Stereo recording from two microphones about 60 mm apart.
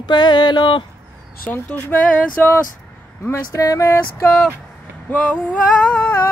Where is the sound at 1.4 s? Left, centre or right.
Left.